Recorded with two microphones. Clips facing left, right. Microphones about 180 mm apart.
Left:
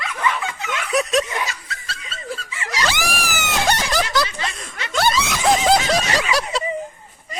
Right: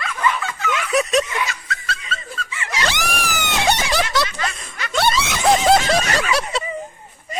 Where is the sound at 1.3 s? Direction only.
35° left (ahead or behind).